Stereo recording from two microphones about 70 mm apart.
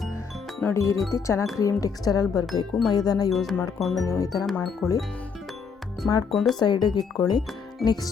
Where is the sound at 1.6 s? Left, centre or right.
Left.